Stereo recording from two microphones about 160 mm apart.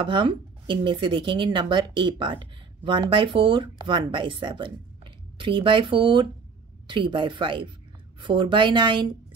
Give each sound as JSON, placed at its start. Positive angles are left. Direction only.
{"t": 0.0, "sound": "speech", "side_deg": -30}